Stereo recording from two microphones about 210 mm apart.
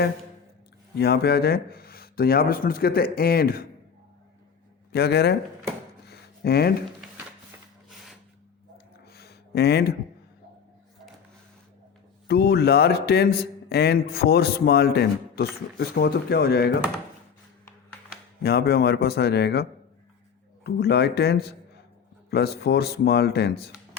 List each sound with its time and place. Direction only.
0.9 s speech: 50° left (ahead or behind)
4.9 s speech: 50° left (ahead or behind)
6.1 s a sound: 50° left (ahead or behind)
9.1 s a sound: 50° left (ahead or behind)
12.3 s speech: 50° left (ahead or behind)
18.4 s speech: 50° left (ahead or behind)
20.7 s speech: 50° left (ahead or behind)